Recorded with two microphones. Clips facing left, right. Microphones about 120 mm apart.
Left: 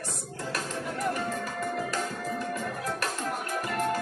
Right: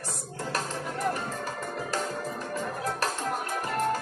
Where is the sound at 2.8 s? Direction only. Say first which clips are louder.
Right 3 dB; 35° right (ahead or behind).